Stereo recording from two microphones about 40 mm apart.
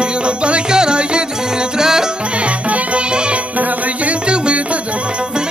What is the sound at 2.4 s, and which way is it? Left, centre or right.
Music, right.